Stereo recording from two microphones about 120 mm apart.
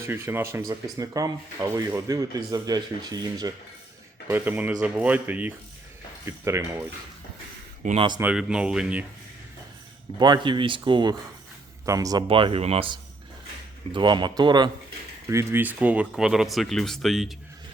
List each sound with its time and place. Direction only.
0.1 s speech: 20° right (ahead or behind)
4.3 s speech: 15° right (ahead or behind)
7.9 s speech: 40° right (ahead or behind)
8.2 s speech: 10° right (ahead or behind)
10.2 s speech: 40° right (ahead or behind)
11.9 s speech: 30° right (ahead or behind)
12.3 s speech: 50° right (ahead or behind)
13.9 s speech: 40° right (ahead or behind)
15.3 s speech: 25° right (ahead or behind); by 17.3 s centre (ahead or behind)